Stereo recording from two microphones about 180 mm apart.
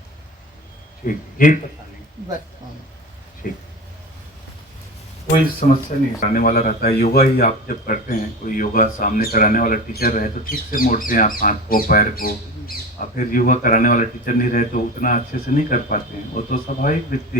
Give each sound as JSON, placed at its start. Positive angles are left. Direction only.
{"t": 1.0, "sound": "a man's voice", "side_deg": 45}
{"t": 3.4, "sound": "a man's voice", "side_deg": 55}
{"t": 5.6, "sound": "a man's voice", "side_deg": 50}